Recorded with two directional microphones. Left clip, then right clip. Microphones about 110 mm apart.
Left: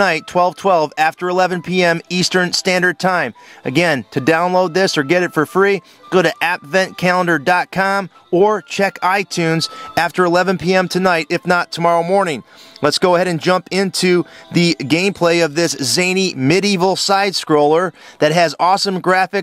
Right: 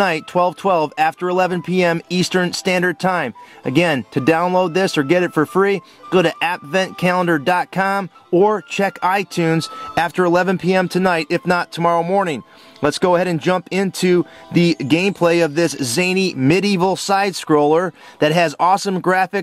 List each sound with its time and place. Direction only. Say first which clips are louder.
0.0 s speech: left 2 dB; 40° left (ahead or behind)